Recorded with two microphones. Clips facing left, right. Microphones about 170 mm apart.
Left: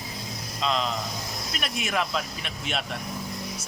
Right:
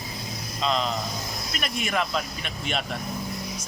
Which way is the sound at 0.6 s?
Centre (ahead or behind).